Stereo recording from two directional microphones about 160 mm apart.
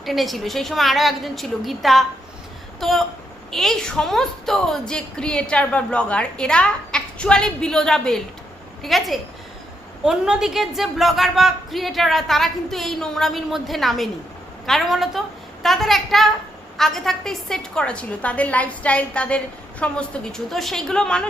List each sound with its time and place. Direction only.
0.0 s a woman's voice: centre (ahead or behind)